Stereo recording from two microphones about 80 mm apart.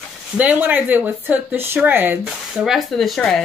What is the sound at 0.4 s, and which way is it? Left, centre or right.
Speech, right.